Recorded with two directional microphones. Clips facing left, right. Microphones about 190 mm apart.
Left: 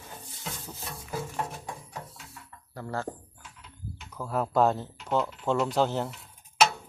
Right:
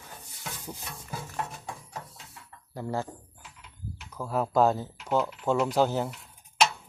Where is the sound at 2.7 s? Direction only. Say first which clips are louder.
Right 2 dB; 15° right (ahead or behind).